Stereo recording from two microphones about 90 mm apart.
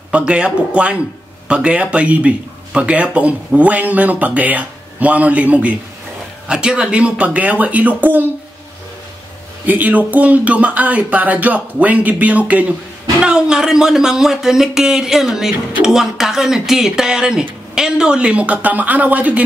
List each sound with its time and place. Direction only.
0.1 s speech: 10° right (ahead or behind)
9.7 s speech: 20° right (ahead or behind)